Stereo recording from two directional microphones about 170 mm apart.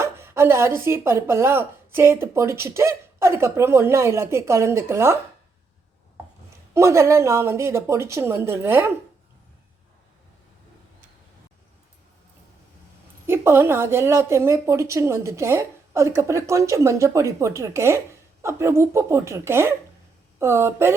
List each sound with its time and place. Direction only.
0.0 s speech: 15° right (ahead or behind)
6.7 s speech: 15° right (ahead or behind)
13.2 s speech: 15° right (ahead or behind)